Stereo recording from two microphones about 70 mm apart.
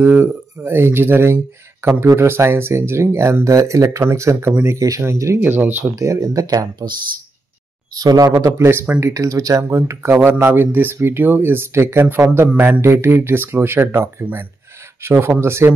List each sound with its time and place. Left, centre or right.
0.0 s speech: right
4.7 s speech: right
5.4 s speech: right
5.9 s speech: right
7.9 s speech: right
8.5 s speech: right
9.0 s speech: right
10.2 s speech: right
15.0 s speech: right